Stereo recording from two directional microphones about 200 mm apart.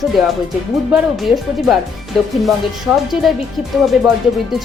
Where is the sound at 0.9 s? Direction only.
Centre (ahead or behind).